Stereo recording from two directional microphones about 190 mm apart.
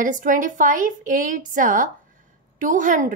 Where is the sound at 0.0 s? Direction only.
45° right (ahead or behind).